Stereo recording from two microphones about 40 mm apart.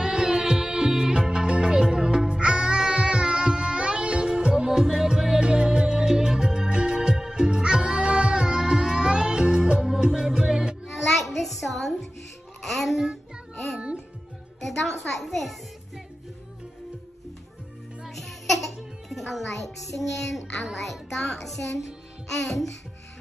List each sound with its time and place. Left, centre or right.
0.0 s music: centre
10.9 s music: centre
14.6 s a sound: centre
18.0 s music: centre